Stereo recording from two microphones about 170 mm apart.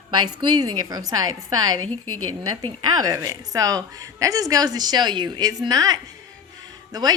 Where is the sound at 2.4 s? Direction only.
20° right (ahead or behind).